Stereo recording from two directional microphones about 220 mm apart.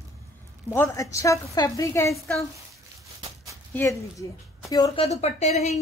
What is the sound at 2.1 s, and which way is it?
Speech, centre (ahead or behind).